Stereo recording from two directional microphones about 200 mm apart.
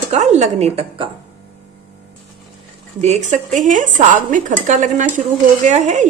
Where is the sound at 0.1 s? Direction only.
35° right (ahead or behind).